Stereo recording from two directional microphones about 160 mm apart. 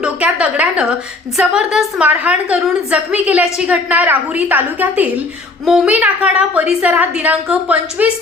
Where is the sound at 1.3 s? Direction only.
5° right (ahead or behind).